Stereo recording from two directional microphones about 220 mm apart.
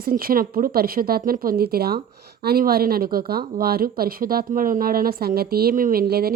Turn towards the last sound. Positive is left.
turn(degrees=-45)  # may be behind; listen again after turning